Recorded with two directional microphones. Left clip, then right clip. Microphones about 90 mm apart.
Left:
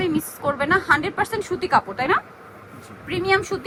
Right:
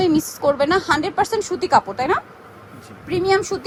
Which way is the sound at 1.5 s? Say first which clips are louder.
Right 3 dB; 40° right (ahead or behind).